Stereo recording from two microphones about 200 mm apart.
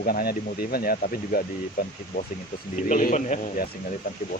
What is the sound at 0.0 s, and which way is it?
Speech, 50° left (ahead or behind).